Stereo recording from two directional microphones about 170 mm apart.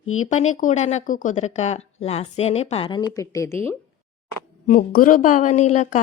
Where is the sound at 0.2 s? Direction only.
45° left (ahead or behind); by 3.8 s 15° left (ahead or behind).